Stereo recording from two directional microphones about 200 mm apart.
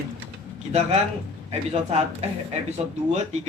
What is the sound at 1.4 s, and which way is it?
Speech, 35° right (ahead or behind).